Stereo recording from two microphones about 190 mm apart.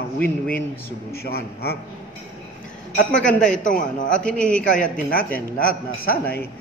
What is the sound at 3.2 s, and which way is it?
Speech, 5° left (ahead or behind).